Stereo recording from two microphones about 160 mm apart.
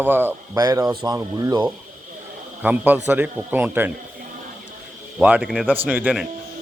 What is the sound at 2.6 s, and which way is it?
Speech, 10° right (ahead or behind).